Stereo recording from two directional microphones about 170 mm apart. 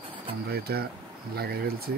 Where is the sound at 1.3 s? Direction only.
65° right (ahead or behind).